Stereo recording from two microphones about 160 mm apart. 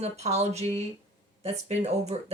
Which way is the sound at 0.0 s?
40° right (ahead or behind).